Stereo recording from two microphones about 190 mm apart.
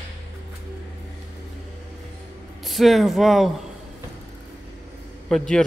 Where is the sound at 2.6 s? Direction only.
Centre (ahead or behind).